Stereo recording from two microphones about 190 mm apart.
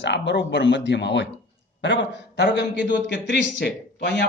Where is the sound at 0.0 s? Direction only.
65° left (ahead or behind).